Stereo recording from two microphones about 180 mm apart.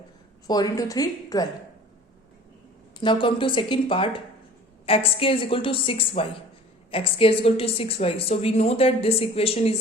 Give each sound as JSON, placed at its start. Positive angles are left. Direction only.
{"t": 0.4, "sound": "speech", "side_deg": 20}
{"t": 3.0, "sound": "a woman's voice", "side_deg": 25}